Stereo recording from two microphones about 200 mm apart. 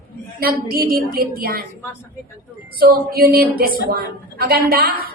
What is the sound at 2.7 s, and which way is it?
A woman's voice, 50° right (ahead or behind).